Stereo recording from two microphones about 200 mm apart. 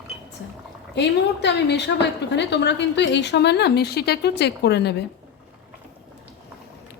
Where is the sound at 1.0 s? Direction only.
60° left (ahead or behind).